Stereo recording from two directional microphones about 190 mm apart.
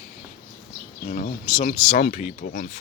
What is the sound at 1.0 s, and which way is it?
Speech, 40° left (ahead or behind).